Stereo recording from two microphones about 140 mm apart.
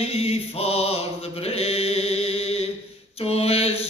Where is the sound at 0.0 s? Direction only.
45° left (ahead or behind).